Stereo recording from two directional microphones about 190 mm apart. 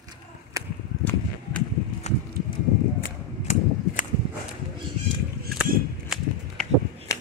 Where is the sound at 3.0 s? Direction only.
40° left (ahead or behind).